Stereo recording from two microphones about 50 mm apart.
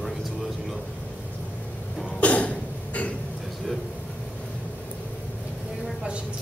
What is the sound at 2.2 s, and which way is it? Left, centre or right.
Cough, left.